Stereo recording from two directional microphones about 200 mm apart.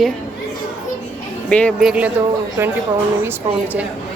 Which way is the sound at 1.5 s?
5° left (ahead or behind).